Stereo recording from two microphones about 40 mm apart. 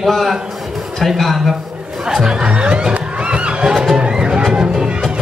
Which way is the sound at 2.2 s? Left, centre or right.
Right.